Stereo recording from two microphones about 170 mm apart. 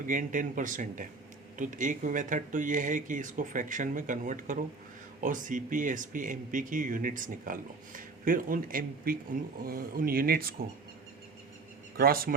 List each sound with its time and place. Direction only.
0.0 s speech: 50° right (ahead or behind)
11.9 s speech: 60° right (ahead or behind)